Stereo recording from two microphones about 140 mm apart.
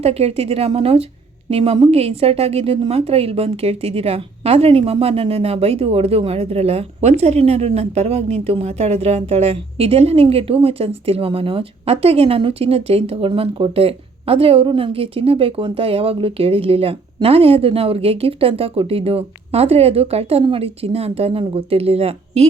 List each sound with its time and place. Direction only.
0.0 s a woman's voice: 45° right (ahead or behind)